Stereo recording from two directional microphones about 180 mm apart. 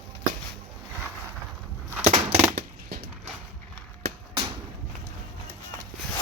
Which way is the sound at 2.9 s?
60° right (ahead or behind).